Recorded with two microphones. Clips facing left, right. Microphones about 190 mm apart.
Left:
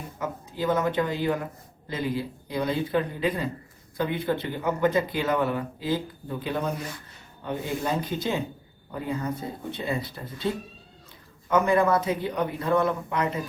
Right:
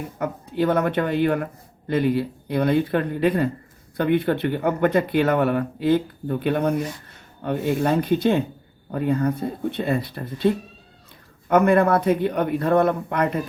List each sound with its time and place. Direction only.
0.2 s speech: 60° right (ahead or behind)